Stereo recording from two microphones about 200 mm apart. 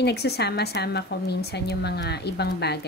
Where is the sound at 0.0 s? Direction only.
55° left (ahead or behind).